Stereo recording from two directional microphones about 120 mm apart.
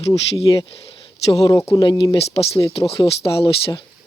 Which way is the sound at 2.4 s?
55° left (ahead or behind).